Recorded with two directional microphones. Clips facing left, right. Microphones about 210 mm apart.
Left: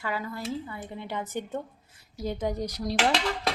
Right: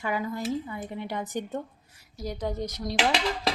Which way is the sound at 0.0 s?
15° right (ahead or behind).